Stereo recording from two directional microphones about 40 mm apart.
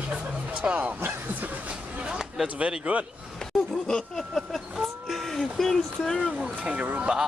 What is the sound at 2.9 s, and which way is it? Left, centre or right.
Speech, right.